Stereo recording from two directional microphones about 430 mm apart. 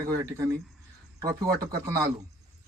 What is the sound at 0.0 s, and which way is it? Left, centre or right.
Speech, centre.